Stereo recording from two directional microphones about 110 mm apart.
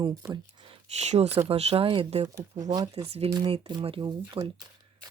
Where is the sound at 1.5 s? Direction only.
60° right (ahead or behind).